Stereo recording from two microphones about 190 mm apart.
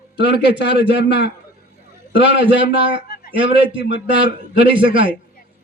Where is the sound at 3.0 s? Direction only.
50° left (ahead or behind).